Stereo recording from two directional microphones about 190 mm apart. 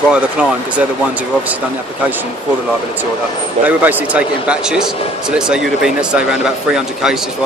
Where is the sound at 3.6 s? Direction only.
10° right (ahead or behind).